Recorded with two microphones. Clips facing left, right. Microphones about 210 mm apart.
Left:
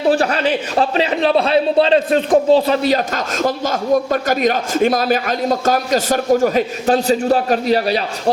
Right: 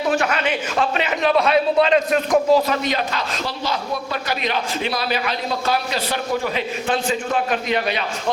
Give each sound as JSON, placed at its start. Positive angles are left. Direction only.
{"t": 0.1, "sound": "a man's voice", "side_deg": 35}